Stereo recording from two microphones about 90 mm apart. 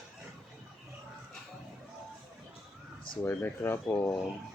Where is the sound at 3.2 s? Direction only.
25° left (ahead or behind).